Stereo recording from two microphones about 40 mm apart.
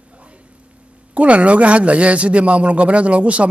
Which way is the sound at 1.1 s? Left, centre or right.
Right.